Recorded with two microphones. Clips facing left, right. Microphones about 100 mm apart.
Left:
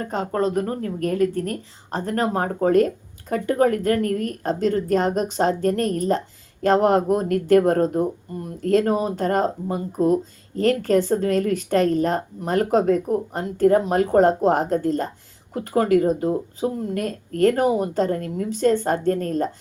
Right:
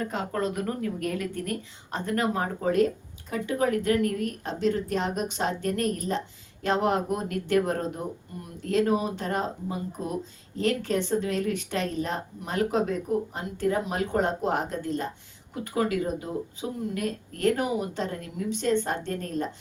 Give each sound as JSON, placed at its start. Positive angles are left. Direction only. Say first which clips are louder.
{"t": 0.0, "sound": "a woman's voice", "louder": "left 6 dB", "side_deg": 35}